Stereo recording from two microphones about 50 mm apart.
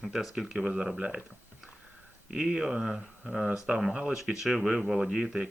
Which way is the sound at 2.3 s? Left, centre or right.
Centre.